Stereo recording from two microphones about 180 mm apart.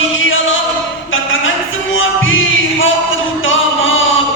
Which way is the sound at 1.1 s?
90° left.